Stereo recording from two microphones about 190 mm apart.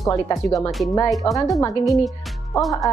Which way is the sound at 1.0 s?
Centre (ahead or behind).